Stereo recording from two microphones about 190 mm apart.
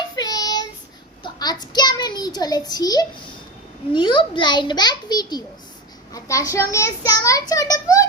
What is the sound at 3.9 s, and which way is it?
A child's voice, 25° left (ahead or behind).